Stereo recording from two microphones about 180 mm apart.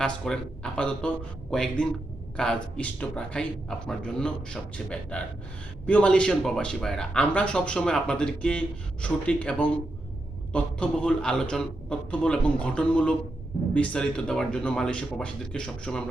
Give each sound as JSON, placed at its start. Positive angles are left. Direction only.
{"t": 0.0, "sound": "speech", "side_deg": 5}
{"t": 5.1, "sound": "gasp", "side_deg": 5}
{"t": 5.8, "sound": "speech", "side_deg": 5}